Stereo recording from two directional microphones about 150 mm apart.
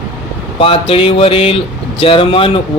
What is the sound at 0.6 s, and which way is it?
Speech, 40° left (ahead or behind).